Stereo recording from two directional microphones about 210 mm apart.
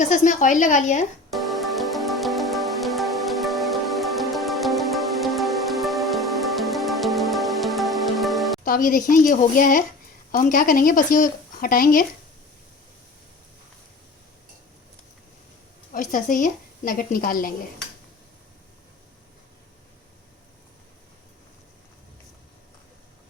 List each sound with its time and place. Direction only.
0.0 s speech: 35° left (ahead or behind)
1.3 s music: centre (ahead or behind)
8.6 s speech: 40° left (ahead or behind)
15.9 s speech: 40° left (ahead or behind)